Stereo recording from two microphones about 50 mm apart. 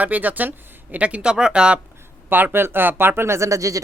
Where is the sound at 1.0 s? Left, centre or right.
Right.